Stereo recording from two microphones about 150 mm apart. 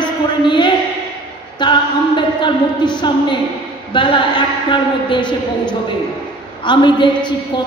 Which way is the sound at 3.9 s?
30° left (ahead or behind).